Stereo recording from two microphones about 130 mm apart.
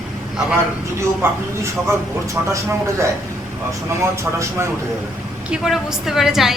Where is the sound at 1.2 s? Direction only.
20° right (ahead or behind).